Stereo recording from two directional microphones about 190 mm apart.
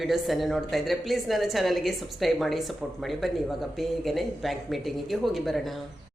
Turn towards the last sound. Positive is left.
turn(degrees=0)  # may be behind; listen again after turning